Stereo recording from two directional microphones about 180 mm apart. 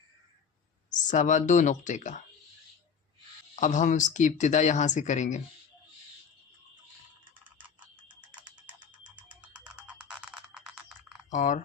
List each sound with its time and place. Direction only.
0.9 s speech: 45° left (ahead or behind)
3.5 s speech: 45° left (ahead or behind)
9.3 s music: 5° right (ahead or behind)
11.3 s speech: 45° left (ahead or behind)